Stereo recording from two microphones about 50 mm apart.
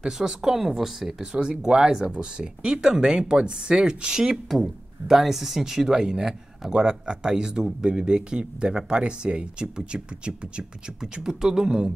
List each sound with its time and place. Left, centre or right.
0.0 s speech: centre